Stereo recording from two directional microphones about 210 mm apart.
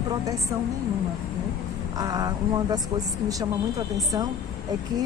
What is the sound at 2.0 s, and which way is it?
Speech, 15° right (ahead or behind).